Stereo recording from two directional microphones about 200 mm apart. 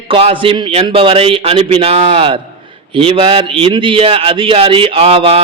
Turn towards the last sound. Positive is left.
turn(degrees=-30)  # may be behind; listen again after turning